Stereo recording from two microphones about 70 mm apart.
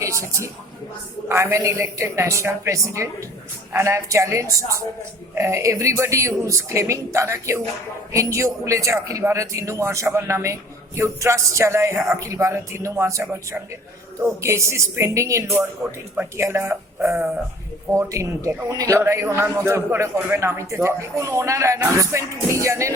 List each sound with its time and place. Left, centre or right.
0.0 s a man's voice: right
16.4 s speech: right
17.9 s a man's voice: right
18.9 s a man's voice: right